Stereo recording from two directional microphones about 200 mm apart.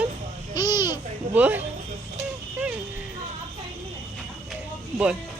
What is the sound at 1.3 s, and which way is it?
Speech, 10° right (ahead or behind).